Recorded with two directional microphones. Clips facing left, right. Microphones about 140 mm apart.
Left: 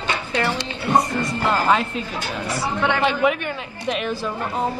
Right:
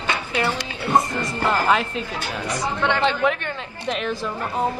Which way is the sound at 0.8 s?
10° left (ahead or behind).